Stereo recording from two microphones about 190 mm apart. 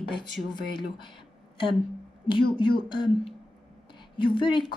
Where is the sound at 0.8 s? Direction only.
25° left (ahead or behind).